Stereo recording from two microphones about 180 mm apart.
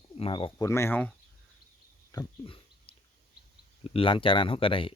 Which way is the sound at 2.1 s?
30° left (ahead or behind).